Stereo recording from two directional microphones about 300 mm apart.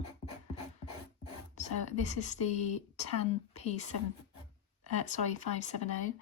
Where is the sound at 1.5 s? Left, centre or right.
Left.